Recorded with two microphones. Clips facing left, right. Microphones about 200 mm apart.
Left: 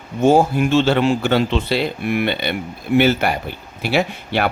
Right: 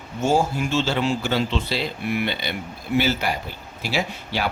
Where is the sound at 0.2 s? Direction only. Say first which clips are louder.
Left 7 dB; 55° left (ahead or behind).